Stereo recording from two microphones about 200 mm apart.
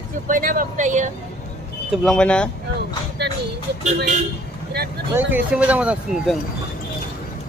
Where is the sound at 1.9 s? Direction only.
5° left (ahead or behind).